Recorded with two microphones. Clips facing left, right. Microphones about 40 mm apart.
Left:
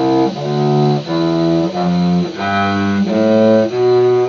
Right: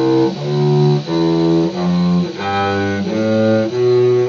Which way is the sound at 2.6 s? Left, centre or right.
Centre.